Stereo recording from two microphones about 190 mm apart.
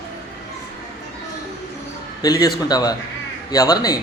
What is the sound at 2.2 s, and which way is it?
A man's voice, 20° left (ahead or behind).